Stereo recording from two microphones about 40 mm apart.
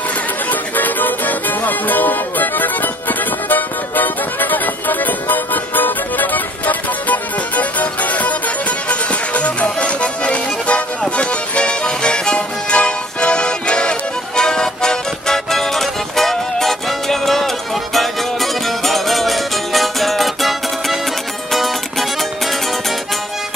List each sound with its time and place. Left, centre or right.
0.5 s music: left; by 22.0 s centre